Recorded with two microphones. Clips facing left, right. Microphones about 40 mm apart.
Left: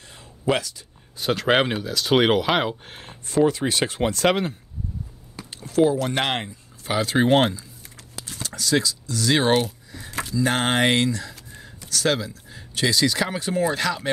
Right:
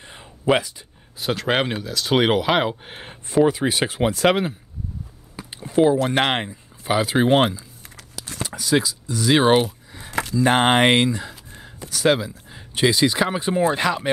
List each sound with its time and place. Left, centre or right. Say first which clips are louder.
0.0 s a sound: right 2 dB; right
1.2 s speech: left 2 dB; centre
2.7 s speech: right 2 dB; centre